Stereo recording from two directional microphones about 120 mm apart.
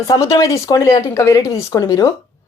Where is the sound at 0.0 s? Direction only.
30° left (ahead or behind).